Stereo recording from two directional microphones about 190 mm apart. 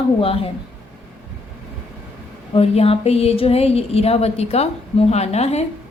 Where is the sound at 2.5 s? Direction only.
30° left (ahead or behind).